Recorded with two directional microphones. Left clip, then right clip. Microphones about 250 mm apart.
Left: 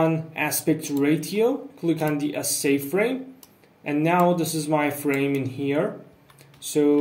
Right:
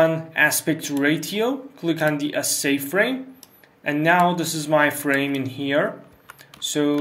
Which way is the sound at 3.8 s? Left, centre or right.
Centre.